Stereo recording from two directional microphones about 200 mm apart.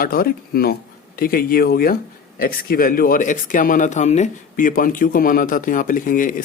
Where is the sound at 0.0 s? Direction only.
45° left (ahead or behind).